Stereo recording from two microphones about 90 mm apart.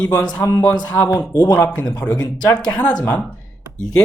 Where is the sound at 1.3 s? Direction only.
50° left (ahead or behind).